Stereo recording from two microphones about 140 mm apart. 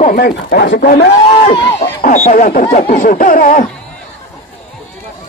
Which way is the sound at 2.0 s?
80° left.